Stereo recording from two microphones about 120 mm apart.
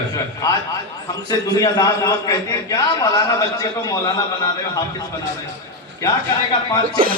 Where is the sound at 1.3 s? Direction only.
30° left (ahead or behind).